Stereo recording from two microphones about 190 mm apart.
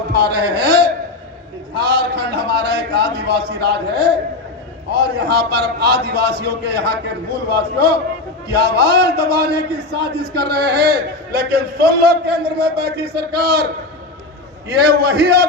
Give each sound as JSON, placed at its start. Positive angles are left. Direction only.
{"t": 0.1, "sound": "a sound", "side_deg": -60}
{"t": 4.9, "sound": "a man's voice", "side_deg": -60}
{"t": 14.9, "sound": "a man's voice", "side_deg": -55}